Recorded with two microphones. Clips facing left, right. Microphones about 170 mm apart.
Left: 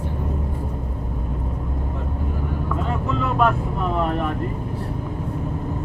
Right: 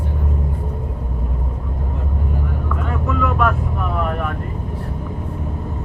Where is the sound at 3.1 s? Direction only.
25° left (ahead or behind).